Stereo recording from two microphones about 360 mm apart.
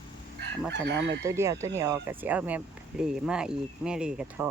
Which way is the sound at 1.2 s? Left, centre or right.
Centre.